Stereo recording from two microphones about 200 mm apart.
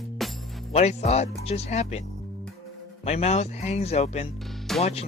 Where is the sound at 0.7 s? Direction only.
30° left (ahead or behind).